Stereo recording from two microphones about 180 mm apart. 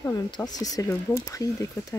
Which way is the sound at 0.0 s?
20° left (ahead or behind).